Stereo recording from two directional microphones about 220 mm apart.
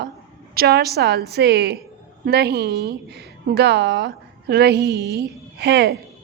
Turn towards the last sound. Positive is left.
turn(degrees=-50)  # may be behind; listen again after turning